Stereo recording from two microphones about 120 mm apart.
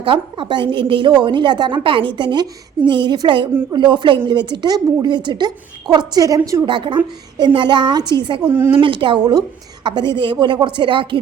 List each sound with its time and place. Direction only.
0.0 s a woman's voice: 45° right (ahead or behind); by 6.6 s 30° right (ahead or behind)
6.7 s a woman's voice: 40° right (ahead or behind)
8.4 s a woman's voice: 15° right (ahead or behind)
8.7 s a woman's voice: 45° right (ahead or behind)